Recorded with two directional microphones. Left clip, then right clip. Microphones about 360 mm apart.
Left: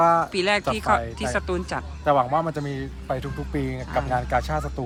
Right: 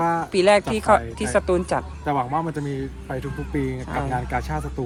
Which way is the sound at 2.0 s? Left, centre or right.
Centre.